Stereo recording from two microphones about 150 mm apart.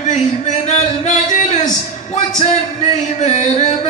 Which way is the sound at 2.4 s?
50° left (ahead or behind).